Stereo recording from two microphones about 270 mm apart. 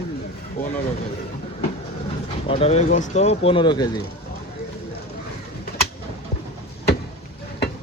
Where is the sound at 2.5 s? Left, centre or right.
Left.